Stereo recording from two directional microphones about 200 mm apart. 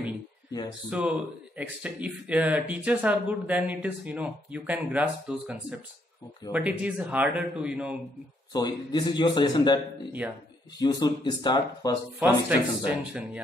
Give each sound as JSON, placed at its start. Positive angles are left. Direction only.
{"t": 0.5, "sound": "speech", "side_deg": 20}
{"t": 0.8, "sound": "speech", "side_deg": -5}
{"t": 6.5, "sound": "speech", "side_deg": -5}
{"t": 8.5, "sound": "a man's voice", "side_deg": 20}
{"t": 10.2, "sound": "speech", "side_deg": -10}
{"t": 10.8, "sound": "a man's voice", "side_deg": 20}
{"t": 12.2, "sound": "speech", "side_deg": -5}